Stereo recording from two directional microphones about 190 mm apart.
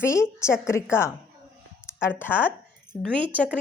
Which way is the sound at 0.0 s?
15° left (ahead or behind).